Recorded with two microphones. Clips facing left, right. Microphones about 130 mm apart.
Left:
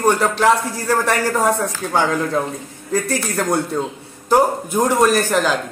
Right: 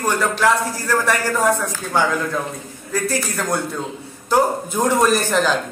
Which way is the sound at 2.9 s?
20° left (ahead or behind).